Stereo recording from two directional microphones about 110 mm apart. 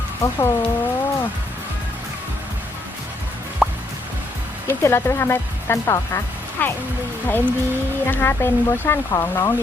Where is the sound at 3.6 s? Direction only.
Centre (ahead or behind).